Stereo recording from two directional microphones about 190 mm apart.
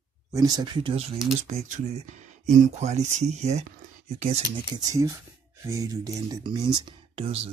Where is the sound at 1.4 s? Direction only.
40° right (ahead or behind).